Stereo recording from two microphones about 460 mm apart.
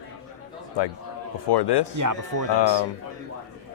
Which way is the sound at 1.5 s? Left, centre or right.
Left.